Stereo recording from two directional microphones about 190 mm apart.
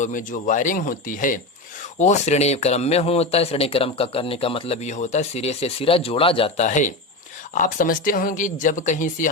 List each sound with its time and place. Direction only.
0.0 s speech: 45° left (ahead or behind)